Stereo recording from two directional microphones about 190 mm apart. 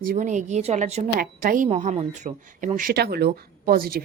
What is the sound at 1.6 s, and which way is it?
Speech, 35° right (ahead or behind).